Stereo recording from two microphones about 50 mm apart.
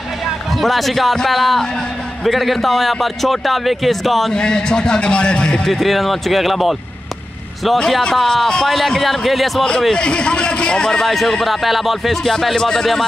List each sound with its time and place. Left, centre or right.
0.6 s a man's voice: centre
4.3 s a man's voice: centre
5.7 s a man's voice: centre
7.8 s a man's voice: centre
9.7 s a man's voice: centre